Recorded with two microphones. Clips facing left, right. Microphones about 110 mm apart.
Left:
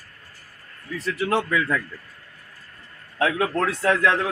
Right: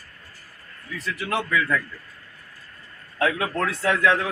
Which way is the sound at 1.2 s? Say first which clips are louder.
Left 3 dB; 35° left (ahead or behind).